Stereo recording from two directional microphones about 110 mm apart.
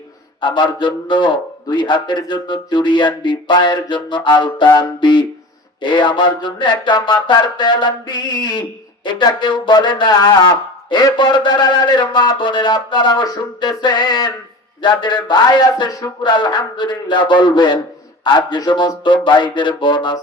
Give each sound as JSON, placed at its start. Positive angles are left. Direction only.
{"t": 0.4, "sound": "speech", "side_deg": 45}
{"t": 15.9, "sound": "speech", "side_deg": 30}
{"t": 16.3, "sound": "speech", "side_deg": 45}